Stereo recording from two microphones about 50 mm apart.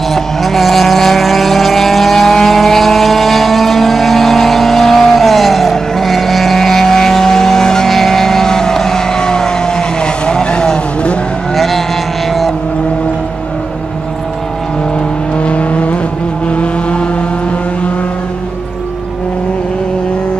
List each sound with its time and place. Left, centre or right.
0.1 s vehicle: centre
11.5 s vehicle: centre
15.3 s vehicle: left